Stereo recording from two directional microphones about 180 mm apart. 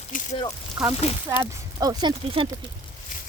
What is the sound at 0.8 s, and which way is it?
Speech, 5° right (ahead or behind).